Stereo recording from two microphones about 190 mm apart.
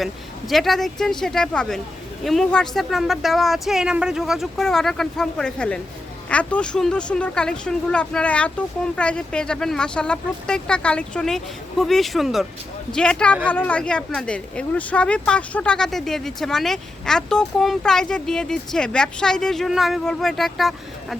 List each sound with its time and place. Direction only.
0.0 s a woman's voice: centre (ahead or behind)